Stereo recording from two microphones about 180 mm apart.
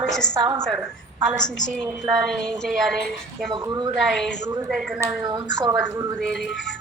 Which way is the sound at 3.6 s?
20° right (ahead or behind).